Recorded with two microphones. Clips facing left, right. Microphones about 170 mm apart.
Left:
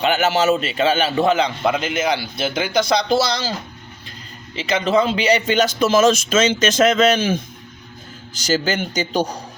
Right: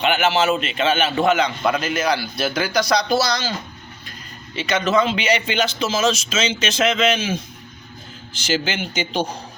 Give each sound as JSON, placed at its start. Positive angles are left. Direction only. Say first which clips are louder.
{"t": 0.0, "sound": "a man's voice", "louder": "left 1 dB", "side_deg": 40}
{"t": 4.5, "sound": "speech", "louder": "left 1 dB", "side_deg": 30}
{"t": 8.3, "sound": "a man's voice", "louder": "left 3 dB", "side_deg": 40}